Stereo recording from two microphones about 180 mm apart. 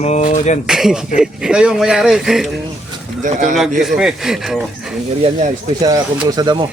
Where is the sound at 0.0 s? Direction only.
40° left (ahead or behind).